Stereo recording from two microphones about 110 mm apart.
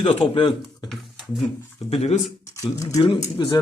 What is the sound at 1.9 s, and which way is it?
Speech, 70° left (ahead or behind).